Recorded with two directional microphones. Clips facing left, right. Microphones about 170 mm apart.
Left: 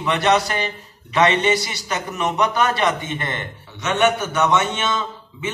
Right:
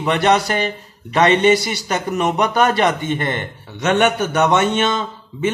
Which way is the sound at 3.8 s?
55° right (ahead or behind).